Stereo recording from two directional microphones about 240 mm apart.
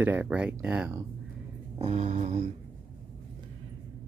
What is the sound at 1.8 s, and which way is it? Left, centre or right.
Speech, right.